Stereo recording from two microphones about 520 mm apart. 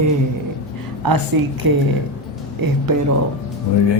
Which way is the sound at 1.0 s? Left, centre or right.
Right.